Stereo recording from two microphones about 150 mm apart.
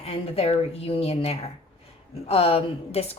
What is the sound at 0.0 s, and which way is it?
Speech, 45° left (ahead or behind).